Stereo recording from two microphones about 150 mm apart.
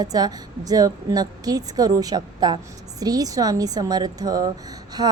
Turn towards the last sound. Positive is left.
turn(degrees=-25)  # may be behind; listen again after turning